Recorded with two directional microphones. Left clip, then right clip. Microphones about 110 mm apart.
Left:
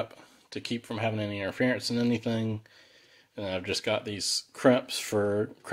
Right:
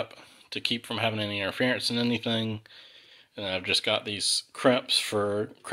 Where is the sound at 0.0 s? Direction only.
35° left (ahead or behind).